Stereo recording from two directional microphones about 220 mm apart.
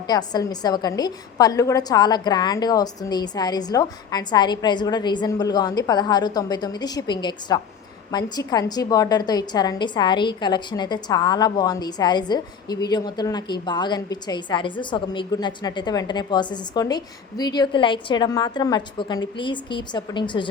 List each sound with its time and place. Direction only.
0.1 s a woman's voice: 20° left (ahead or behind)